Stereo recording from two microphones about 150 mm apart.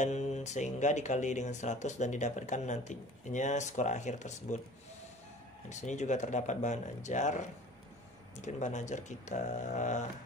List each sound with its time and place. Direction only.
0.0 s speech: 50° left (ahead or behind)
5.7 s speech: 50° left (ahead or behind)